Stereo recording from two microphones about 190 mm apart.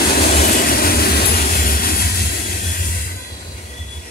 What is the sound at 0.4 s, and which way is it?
Train, 50° left (ahead or behind).